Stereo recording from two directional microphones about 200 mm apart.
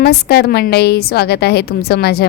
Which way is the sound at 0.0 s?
55° left (ahead or behind).